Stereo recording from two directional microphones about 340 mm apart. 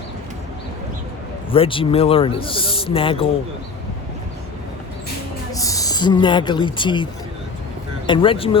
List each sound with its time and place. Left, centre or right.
1.5 s a man's voice: centre
5.5 s speech: centre